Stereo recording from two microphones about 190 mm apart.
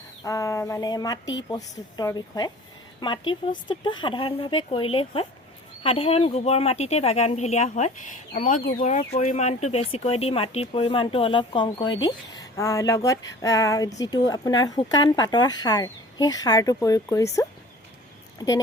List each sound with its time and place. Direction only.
0.2 s speech: 15° left (ahead or behind)
18.3 s speech: 20° left (ahead or behind)